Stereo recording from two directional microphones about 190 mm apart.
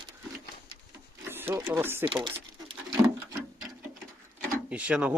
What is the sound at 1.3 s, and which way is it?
Printer, 10° right (ahead or behind).